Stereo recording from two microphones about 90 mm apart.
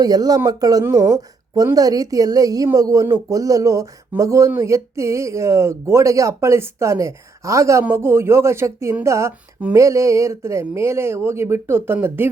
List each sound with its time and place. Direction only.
0.0 s a woman's voice: 45° right (ahead or behind); by 12.3 s 25° right (ahead or behind)